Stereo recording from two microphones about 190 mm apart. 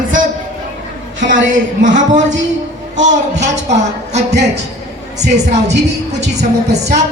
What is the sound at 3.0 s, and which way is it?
A man's voice, 40° right (ahead or behind).